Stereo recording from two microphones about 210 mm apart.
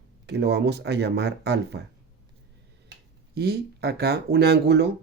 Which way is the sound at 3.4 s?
50° right (ahead or behind).